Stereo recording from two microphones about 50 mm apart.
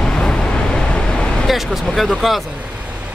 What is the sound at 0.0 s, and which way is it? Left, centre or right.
Vehicle, centre.